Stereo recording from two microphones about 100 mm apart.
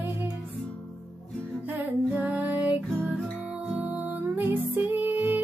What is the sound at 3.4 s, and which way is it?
Music, 10° right (ahead or behind).